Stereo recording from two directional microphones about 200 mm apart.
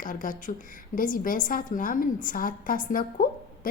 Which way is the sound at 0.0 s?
40° left (ahead or behind).